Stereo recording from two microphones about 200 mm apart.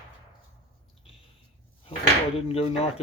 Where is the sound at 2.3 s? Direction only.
30° left (ahead or behind).